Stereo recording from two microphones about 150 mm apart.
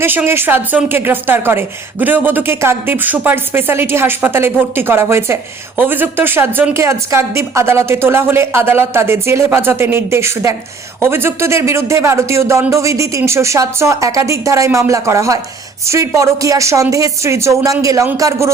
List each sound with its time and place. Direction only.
0.0 s a woman's voice: 15° right (ahead or behind)